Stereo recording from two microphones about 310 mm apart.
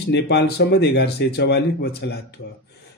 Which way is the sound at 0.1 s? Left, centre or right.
Left.